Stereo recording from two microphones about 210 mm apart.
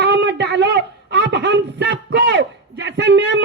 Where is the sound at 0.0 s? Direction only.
55° right (ahead or behind).